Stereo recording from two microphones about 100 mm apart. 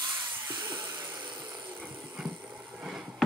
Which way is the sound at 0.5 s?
45° right (ahead or behind).